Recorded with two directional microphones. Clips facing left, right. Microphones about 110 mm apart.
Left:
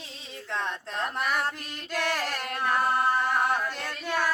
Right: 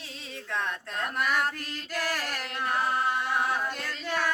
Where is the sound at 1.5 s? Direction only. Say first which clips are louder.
Left 1 dB; 20° left (ahead or behind).